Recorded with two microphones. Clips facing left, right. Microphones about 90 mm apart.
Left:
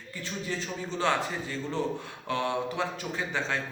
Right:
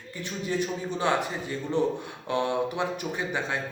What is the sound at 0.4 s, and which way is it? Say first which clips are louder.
A man's voice: right 7 dB; 15° right (ahead or behind).